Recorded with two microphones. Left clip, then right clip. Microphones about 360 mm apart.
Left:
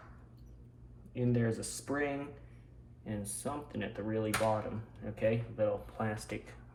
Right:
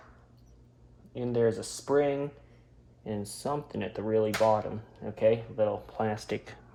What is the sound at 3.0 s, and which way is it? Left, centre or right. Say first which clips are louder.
Speech: right 7 dB; centre.